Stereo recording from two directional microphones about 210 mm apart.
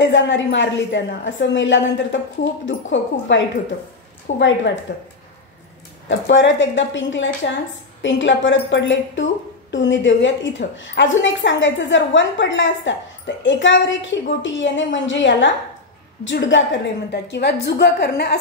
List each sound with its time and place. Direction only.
0.0 s a woman's voice: 60° left (ahead or behind)